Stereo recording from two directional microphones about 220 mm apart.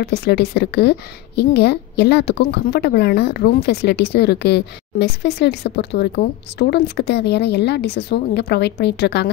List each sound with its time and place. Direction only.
0.0 s a woman's voice: 45° left (ahead or behind)